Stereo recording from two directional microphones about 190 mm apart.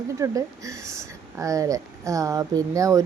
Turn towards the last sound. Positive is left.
turn(degrees=-15)  # may be behind; listen again after turning